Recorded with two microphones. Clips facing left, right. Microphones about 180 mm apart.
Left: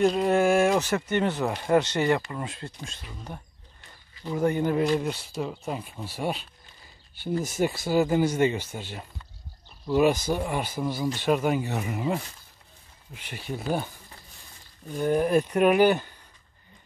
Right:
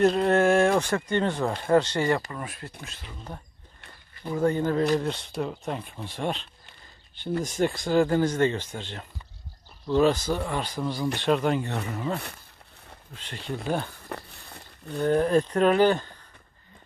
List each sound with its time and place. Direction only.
0.0 s speech: centre (ahead or behind); by 2.7 s 25° left (ahead or behind)
4.3 s speech: 15° left (ahead or behind)
14.0 s a sound: 65° right (ahead or behind)
15.0 s speech: 10° left (ahead or behind)